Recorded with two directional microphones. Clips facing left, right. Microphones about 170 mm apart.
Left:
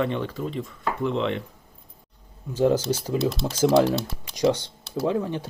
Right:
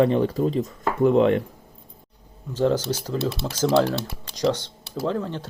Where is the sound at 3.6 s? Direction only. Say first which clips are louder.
Left 1 dB; 15° left (ahead or behind).